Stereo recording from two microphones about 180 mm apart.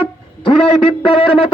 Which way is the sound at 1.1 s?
30° left (ahead or behind).